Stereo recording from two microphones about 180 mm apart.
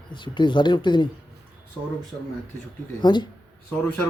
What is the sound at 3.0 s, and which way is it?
Speech, 25° left (ahead or behind).